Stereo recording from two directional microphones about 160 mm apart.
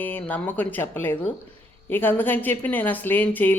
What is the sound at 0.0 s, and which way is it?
Speech, 10° left (ahead or behind).